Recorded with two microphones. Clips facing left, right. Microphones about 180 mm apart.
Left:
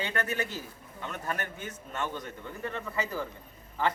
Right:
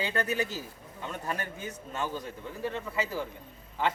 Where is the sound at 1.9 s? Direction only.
10° right (ahead or behind).